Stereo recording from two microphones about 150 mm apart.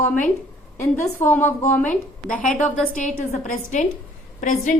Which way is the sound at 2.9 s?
55° left (ahead or behind).